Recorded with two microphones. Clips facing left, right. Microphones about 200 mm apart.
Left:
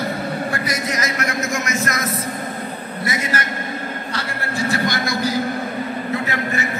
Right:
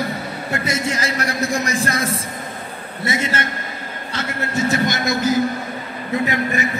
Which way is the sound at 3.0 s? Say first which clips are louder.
Right 2 dB; 25° right (ahead or behind).